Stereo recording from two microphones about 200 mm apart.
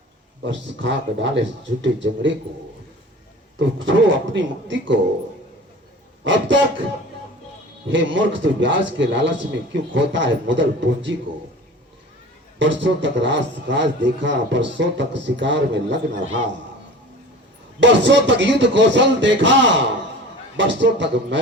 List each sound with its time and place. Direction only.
0.4 s a man's voice: 65° right (ahead or behind)
3.6 s a man's voice: 65° right (ahead or behind)
6.2 s a man's voice: 65° right (ahead or behind)
7.9 s a man's voice: 65° right (ahead or behind)
12.5 s a man's voice: 65° right (ahead or behind)
17.7 s a man's voice: 65° right (ahead or behind)